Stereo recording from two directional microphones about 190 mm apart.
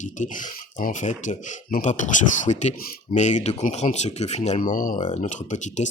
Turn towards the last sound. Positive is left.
turn(degrees=40)  # may be behind; listen again after turning